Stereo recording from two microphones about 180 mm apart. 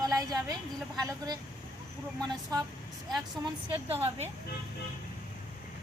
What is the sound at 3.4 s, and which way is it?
Speech, 20° right (ahead or behind).